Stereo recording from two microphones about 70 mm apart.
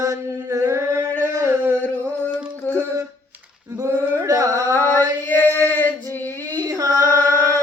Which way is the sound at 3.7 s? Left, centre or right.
Right.